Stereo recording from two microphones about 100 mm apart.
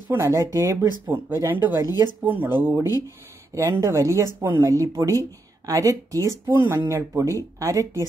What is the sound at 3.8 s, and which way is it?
Speech, 30° right (ahead or behind).